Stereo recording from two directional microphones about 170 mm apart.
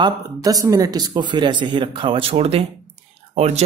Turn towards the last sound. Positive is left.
turn(degrees=-40)  # may be behind; listen again after turning